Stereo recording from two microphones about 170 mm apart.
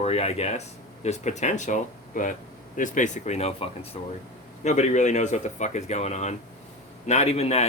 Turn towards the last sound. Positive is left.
turn(degrees=40)  # may be behind; listen again after turning